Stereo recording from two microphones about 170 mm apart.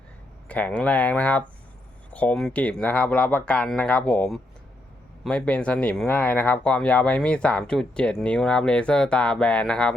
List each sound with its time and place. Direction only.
0.4 s speech: 10° left (ahead or behind)